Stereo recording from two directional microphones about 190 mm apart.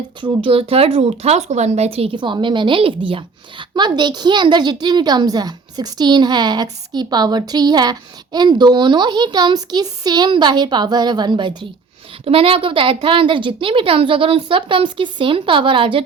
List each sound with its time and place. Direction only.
0.2 s speech: 30° right (ahead or behind)